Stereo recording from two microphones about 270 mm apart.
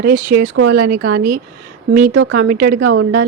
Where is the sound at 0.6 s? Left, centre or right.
Right.